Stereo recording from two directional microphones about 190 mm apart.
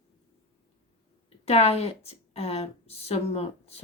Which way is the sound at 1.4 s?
35° left (ahead or behind).